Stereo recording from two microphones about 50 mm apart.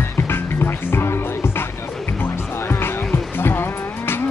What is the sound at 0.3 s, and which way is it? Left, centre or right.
Music, left.